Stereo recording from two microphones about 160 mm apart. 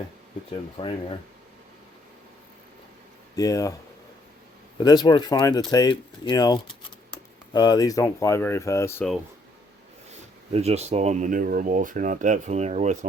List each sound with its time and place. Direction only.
0.5 s speech: 35° left (ahead or behind)
3.3 s speech: 20° left (ahead or behind)
4.8 s speech: 25° left (ahead or behind)
10.5 s speech: 40° right (ahead or behind)